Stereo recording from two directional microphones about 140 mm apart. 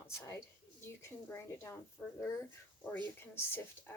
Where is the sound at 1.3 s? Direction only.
20° left (ahead or behind).